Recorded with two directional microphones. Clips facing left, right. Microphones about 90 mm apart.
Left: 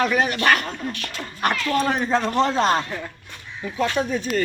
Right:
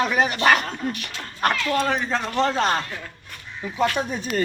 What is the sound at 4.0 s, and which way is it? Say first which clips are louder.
Speech: left 3 dB; 5° right (ahead or behind).